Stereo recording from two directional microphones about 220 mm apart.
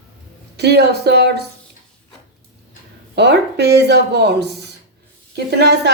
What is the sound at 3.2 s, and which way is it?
Speech, 50° right (ahead or behind).